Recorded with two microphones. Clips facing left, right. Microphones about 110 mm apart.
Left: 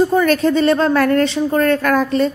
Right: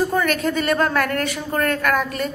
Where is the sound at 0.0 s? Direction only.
25° left (ahead or behind).